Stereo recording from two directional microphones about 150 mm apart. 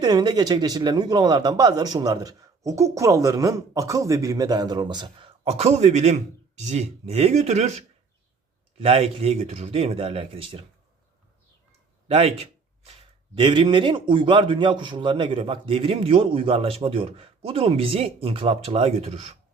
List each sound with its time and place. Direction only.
0.0 s a man's voice: 25° right (ahead or behind)
12.0 s a sound: 40° right (ahead or behind)
13.3 s a man's voice: 35° right (ahead or behind)